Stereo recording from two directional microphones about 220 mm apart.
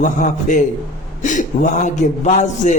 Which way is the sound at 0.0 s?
35° left (ahead or behind).